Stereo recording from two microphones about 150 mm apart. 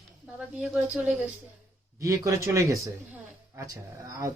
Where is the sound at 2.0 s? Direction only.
20° right (ahead or behind).